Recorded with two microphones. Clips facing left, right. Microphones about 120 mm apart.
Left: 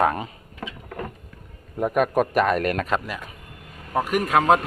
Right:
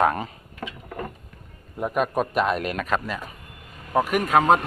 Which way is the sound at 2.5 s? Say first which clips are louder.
Left 4 dB; 50° left (ahead or behind).